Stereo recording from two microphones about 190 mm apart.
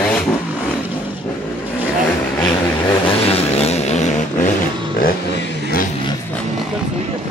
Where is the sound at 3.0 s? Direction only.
30° left (ahead or behind).